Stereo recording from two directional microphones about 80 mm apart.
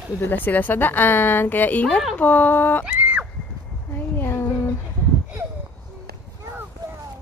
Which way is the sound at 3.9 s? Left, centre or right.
Left.